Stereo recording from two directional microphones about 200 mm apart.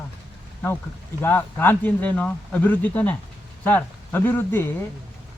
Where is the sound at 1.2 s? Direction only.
10° left (ahead or behind).